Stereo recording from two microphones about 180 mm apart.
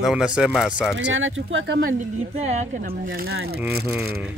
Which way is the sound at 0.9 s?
90° right.